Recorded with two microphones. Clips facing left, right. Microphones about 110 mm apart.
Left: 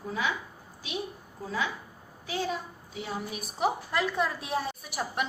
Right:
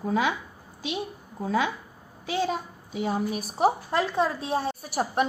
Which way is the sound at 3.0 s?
45° right (ahead or behind).